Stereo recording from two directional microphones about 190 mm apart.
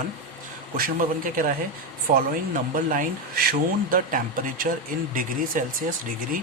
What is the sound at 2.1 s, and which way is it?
Speech, 45° right (ahead or behind).